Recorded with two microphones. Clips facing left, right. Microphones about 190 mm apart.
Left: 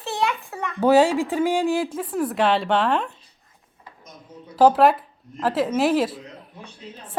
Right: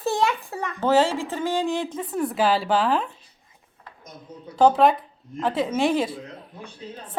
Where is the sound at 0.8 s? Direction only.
15° left (ahead or behind).